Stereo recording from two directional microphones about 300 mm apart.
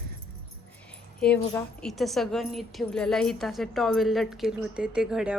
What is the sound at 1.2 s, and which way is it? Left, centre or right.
A woman's voice, centre.